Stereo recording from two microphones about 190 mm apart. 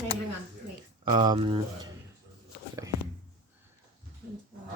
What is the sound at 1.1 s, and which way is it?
Speech, 25° right (ahead or behind).